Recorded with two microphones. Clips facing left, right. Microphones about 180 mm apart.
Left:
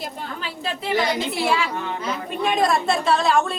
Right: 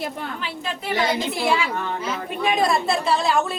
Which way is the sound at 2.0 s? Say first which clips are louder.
Even; centre (ahead or behind).